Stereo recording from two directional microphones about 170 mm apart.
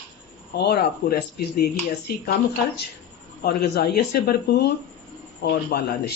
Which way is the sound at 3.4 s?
65° left (ahead or behind).